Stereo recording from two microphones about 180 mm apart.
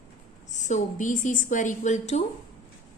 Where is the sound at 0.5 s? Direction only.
40° left (ahead or behind).